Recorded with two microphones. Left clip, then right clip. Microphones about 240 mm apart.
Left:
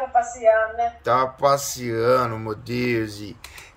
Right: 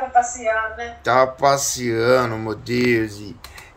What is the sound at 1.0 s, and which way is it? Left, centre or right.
Speech, centre.